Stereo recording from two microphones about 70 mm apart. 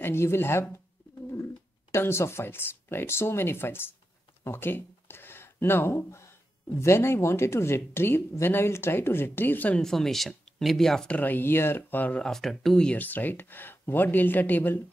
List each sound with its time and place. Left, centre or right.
0.0 s speech: left
1.9 s speech: left
9.8 s speech: centre
11.1 s speech: left
12.2 s speech: centre
12.8 s speech: left